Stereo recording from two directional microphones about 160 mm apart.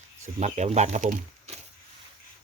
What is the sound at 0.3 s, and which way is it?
Speech, 45° right (ahead or behind).